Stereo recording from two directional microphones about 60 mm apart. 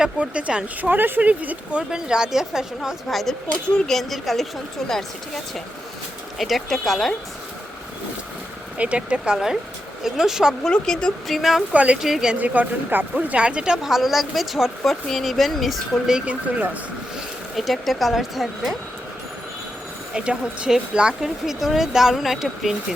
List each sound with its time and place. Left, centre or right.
0.0 s speech: centre
1.9 s speech: centre
3.8 s speech: centre
6.4 s speech: centre
8.8 s speech: centre
10.6 s speech: centre
11.7 s speech: right
12.0 s speech: centre
12.4 s speech: right
13.1 s speech: centre
16.1 s speech: right
17.7 s speech: centre
20.1 s speech: centre